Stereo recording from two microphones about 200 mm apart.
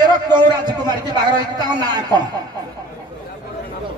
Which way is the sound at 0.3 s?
20° right (ahead or behind).